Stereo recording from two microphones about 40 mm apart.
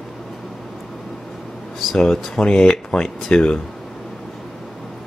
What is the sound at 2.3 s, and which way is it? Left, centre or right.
Speech, left.